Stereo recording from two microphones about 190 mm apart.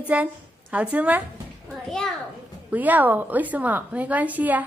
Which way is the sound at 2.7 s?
10° right (ahead or behind).